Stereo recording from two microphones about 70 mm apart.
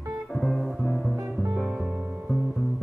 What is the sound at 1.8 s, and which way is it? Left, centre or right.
Music, centre.